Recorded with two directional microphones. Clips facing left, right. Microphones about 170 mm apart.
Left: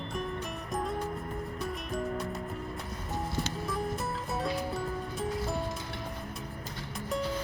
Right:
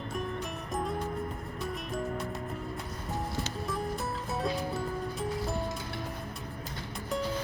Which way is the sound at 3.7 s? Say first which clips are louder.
Even; centre (ahead or behind).